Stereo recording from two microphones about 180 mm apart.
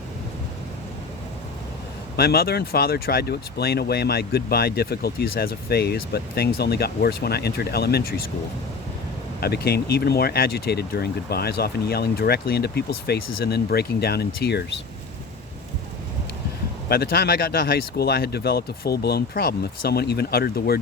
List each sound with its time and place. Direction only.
2.1 s speech: 60° left (ahead or behind)
9.4 s speech: 60° left (ahead or behind)
16.9 s speech: 60° left (ahead or behind)